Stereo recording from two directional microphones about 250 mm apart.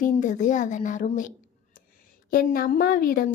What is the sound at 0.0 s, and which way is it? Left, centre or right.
A woman's voice, left.